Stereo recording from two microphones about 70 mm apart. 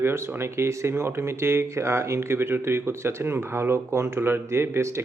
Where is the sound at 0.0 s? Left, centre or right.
Right.